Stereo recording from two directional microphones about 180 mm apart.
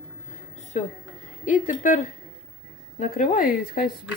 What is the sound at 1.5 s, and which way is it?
Speech, 45° left (ahead or behind).